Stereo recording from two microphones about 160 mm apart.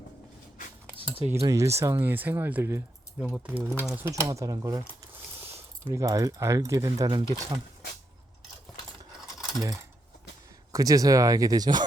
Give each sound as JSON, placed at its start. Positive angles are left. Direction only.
{"t": 1.3, "sound": "speech", "side_deg": -20}
{"t": 9.2, "sound": "a sound", "side_deg": 0}
{"t": 9.6, "sound": "speech", "side_deg": -20}